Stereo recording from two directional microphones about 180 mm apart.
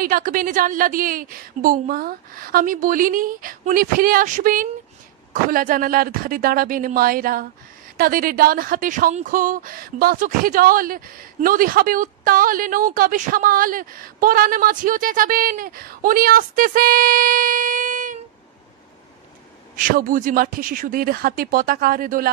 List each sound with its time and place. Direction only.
0.0 s speech: 50° right (ahead or behind)
19.8 s speech: 50° right (ahead or behind)